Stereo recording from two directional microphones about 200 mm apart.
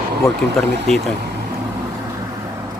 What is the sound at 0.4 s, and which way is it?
Speech, 5° left (ahead or behind).